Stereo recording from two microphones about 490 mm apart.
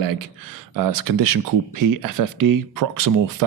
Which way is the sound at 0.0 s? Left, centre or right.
Right.